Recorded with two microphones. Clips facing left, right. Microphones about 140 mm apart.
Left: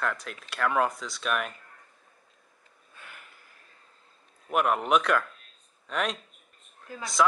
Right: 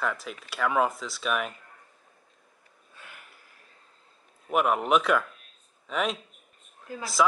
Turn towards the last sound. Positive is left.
turn(degrees=0)  # may be behind; listen again after turning